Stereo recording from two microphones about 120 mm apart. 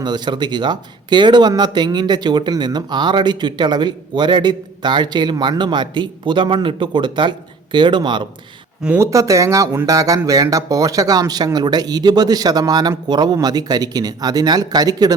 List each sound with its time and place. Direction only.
0.0 s speech: 40° right (ahead or behind)
9.0 s speech: 25° right (ahead or behind)